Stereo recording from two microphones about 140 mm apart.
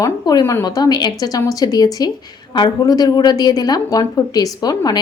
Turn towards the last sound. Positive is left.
turn(degrees=30)  # may be behind; listen again after turning